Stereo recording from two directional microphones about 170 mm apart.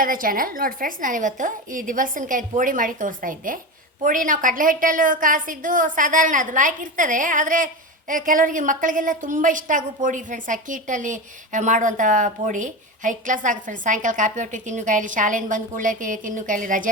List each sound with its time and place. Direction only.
0.0 s a woman's voice: 55° right (ahead or behind)